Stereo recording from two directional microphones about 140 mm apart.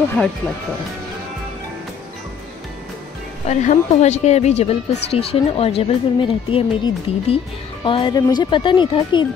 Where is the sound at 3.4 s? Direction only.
55° left (ahead or behind).